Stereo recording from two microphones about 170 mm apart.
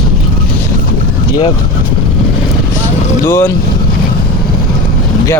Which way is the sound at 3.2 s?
15° left (ahead or behind).